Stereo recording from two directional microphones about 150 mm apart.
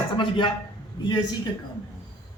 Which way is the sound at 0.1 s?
30° left (ahead or behind).